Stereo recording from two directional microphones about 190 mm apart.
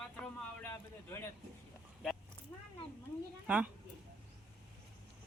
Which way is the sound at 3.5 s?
10° right (ahead or behind).